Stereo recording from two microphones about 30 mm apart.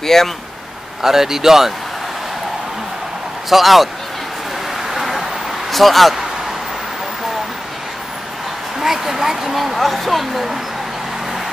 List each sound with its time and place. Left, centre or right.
0.0 s speech: centre
1.0 s speech: centre
3.4 s speech: centre
4.9 s vehicle: centre
5.7 s speech: centre
8.7 s a sound: centre
9.6 s speech: centre